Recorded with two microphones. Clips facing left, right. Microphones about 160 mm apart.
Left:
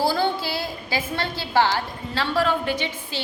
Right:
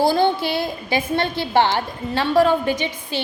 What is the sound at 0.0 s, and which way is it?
A woman's voice, 20° right (ahead or behind).